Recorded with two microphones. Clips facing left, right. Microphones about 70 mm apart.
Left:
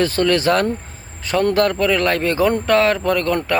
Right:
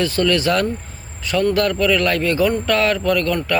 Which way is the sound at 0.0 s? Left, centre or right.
Left.